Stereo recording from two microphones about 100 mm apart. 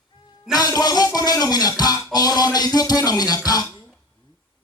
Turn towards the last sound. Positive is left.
turn(degrees=35)  # may be behind; listen again after turning